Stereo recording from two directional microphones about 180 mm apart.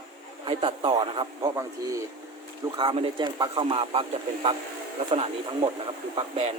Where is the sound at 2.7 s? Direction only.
30° right (ahead or behind).